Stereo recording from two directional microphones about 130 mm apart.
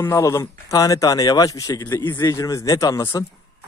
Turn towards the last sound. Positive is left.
turn(degrees=25)  # may be behind; listen again after turning